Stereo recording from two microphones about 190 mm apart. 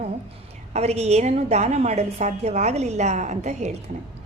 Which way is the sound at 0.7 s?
35° right (ahead or behind).